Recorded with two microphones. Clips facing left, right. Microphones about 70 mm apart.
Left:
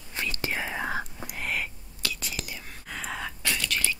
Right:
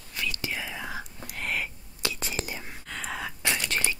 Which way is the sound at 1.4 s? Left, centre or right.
Centre.